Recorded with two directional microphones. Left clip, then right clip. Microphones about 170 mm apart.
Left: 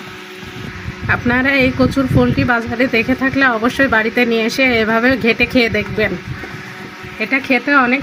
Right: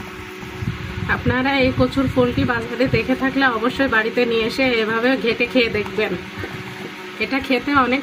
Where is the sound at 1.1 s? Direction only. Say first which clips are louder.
Left 5 dB; 65° left (ahead or behind).